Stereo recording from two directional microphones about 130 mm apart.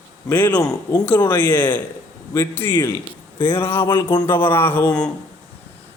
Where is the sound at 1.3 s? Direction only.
15° left (ahead or behind).